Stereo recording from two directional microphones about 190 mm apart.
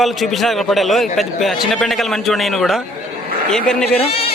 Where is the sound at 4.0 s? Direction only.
30° left (ahead or behind).